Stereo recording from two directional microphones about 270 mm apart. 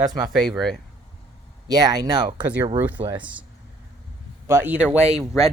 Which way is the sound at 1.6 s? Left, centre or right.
Centre.